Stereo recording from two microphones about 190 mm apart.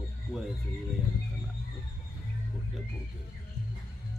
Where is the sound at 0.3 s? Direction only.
Centre (ahead or behind).